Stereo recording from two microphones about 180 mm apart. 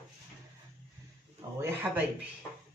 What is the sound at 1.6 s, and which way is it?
Speech, 10° right (ahead or behind).